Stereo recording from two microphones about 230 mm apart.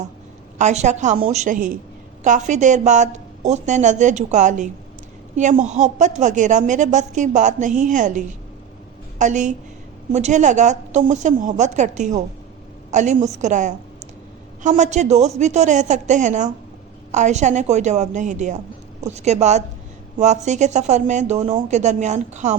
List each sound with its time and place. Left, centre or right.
0.6 s a woman's voice: right